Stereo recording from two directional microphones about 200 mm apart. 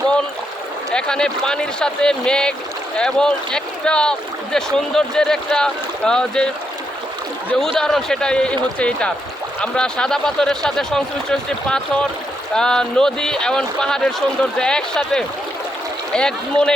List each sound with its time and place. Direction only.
0.9 s speech: 5° left (ahead or behind)
7.6 s speech: centre (ahead or behind)